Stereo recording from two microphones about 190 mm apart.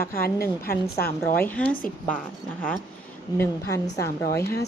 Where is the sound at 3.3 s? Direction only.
10° left (ahead or behind).